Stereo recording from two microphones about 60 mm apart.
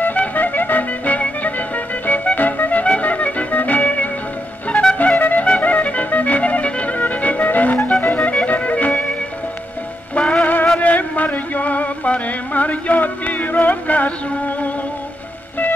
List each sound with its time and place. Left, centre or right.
0.0 s music: left
10.1 s music: centre
10.4 s music: left